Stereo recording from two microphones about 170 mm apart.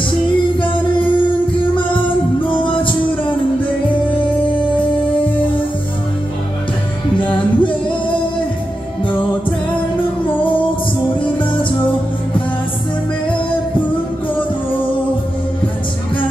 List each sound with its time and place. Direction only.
2.4 s music: 30° left (ahead or behind)
7.2 s music: 30° left (ahead or behind)